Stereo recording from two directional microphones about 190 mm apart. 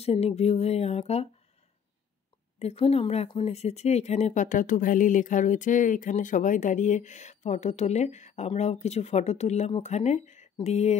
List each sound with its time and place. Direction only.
0.0 s speech: 35° left (ahead or behind)
2.6 s speech: 30° left (ahead or behind)